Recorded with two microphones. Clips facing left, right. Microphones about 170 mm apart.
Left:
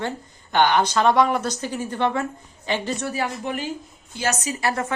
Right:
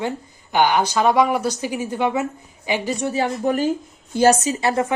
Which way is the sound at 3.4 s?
40° right (ahead or behind).